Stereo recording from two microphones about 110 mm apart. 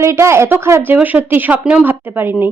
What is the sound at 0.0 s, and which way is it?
A woman's voice, 25° right (ahead or behind).